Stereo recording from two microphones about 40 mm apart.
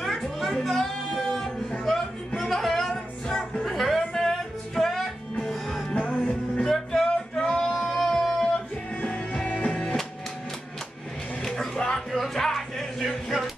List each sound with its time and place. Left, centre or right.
0.0 s music: centre
3.6 s music: centre
5.9 s music: left
6.7 s music: centre
7.3 s male singing: left
7.7 s music: centre
8.9 s music: left
11.4 s music: centre
12.1 s music: centre